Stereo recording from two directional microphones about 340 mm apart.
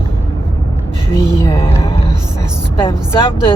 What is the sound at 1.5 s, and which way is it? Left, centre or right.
Music, centre.